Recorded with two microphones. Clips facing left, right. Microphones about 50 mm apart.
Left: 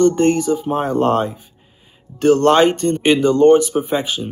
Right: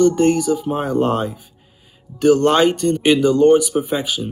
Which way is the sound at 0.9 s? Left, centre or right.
Centre.